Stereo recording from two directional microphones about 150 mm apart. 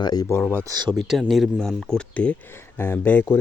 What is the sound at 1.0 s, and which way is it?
Speech, centre (ahead or behind).